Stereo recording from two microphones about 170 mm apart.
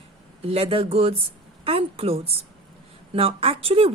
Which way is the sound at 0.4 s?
35° right (ahead or behind).